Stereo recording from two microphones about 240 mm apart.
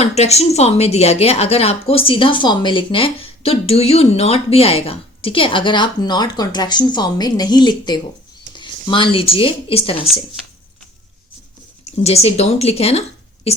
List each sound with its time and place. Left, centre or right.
0.0 s speech: left
8.5 s a sound: centre
9.1 s speech: left
11.9 s speech: left